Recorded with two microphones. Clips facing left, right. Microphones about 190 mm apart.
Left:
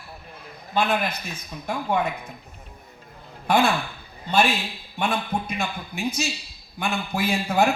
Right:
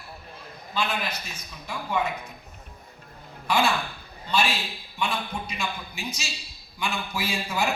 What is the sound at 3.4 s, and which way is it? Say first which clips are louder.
A man's voice: left 4 dB; 55° left (ahead or behind).